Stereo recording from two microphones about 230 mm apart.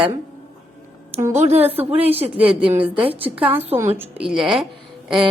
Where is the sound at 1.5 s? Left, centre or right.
Right.